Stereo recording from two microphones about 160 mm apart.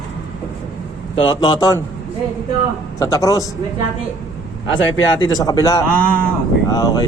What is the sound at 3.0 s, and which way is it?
Speech, 20° left (ahead or behind).